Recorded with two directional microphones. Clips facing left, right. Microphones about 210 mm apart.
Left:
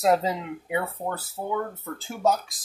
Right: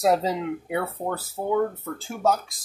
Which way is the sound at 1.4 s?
20° right (ahead or behind).